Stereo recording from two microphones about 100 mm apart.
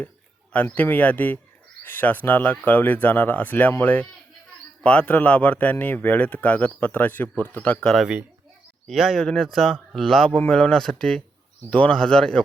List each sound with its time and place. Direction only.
0.5 s speech: 15° left (ahead or behind)
7.9 s speech: 5° right (ahead or behind)